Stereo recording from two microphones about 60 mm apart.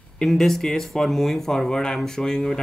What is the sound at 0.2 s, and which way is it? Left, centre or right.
Speech, centre.